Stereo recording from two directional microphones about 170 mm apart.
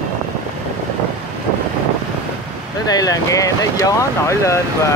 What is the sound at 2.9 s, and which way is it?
Speech, 20° left (ahead or behind).